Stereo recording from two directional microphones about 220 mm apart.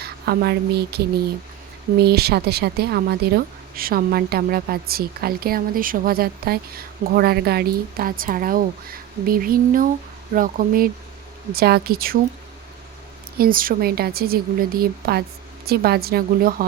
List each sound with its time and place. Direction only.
0.0 s speech: 45° right (ahead or behind)
13.4 s speech: 40° right (ahead or behind)